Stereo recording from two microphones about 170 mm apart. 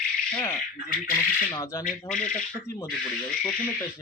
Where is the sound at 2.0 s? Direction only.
5° left (ahead or behind).